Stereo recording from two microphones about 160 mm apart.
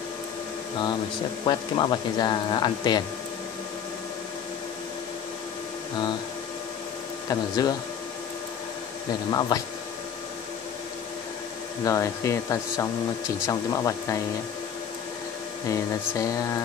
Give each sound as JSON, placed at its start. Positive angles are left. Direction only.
{"t": 1.4, "sound": "speech", "side_deg": 30}
{"t": 7.2, "sound": "speech", "side_deg": 25}
{"t": 9.3, "sound": "speech", "side_deg": 25}
{"t": 11.8, "sound": "speech", "side_deg": 20}
{"t": 15.7, "sound": "speech", "side_deg": 20}